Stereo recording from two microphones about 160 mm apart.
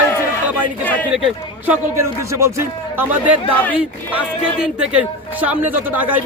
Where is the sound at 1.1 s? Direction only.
5° right (ahead or behind).